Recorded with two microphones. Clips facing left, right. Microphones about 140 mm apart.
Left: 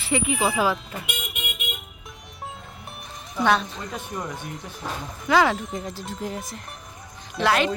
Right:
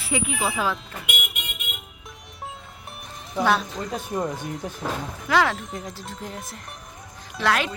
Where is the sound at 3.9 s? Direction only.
30° right (ahead or behind).